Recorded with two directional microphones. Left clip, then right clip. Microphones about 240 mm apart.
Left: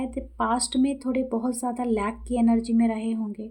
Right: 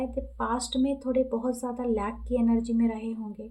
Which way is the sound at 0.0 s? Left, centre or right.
Left.